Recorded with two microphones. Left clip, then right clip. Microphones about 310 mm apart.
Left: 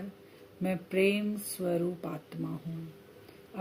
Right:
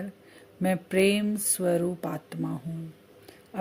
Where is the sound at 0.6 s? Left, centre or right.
Right.